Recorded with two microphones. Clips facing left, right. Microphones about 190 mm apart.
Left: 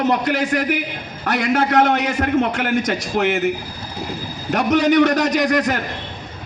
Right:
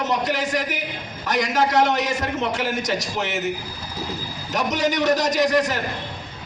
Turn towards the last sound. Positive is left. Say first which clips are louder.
# left 2 dB
turn(degrees=60)  # may be behind; listen again after turning